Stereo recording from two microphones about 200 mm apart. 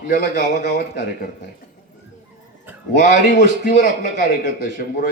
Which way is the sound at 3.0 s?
50° left (ahead or behind).